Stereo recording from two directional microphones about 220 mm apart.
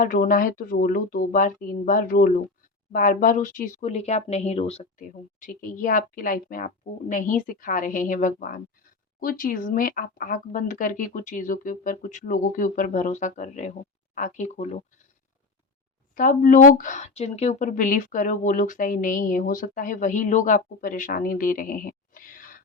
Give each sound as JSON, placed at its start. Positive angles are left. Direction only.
{"t": 0.0, "sound": "speech", "side_deg": 40}
{"t": 16.1, "sound": "speech", "side_deg": 35}